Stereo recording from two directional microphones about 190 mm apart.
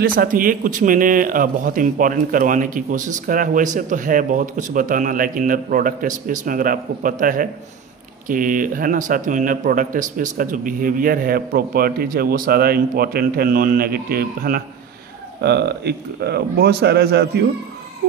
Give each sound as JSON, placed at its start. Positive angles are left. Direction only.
{"t": 0.0, "sound": "speech", "side_deg": -45}